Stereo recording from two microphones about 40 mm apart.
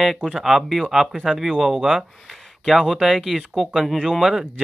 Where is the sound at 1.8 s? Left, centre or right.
Centre.